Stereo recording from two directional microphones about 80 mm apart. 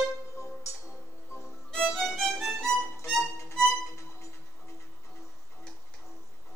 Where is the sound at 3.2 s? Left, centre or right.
Left.